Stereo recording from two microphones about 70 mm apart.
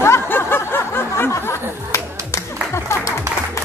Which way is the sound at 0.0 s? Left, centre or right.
Left.